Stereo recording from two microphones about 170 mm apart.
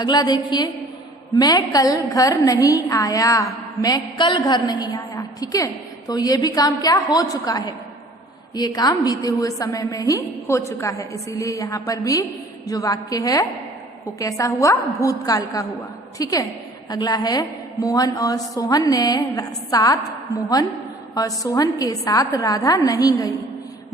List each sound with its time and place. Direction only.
0.0 s a woman's voice: 25° left (ahead or behind)
21.2 s a woman's voice: 20° left (ahead or behind)